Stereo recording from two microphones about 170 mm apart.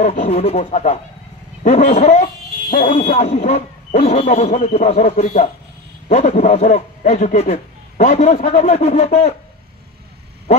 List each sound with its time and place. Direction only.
0.0 s a man's voice: 40° left (ahead or behind)